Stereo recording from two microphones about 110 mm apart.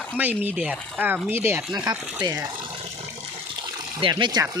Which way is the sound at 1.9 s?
35° right (ahead or behind).